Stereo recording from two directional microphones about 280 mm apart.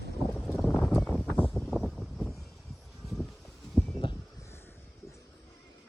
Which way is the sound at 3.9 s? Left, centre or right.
Centre.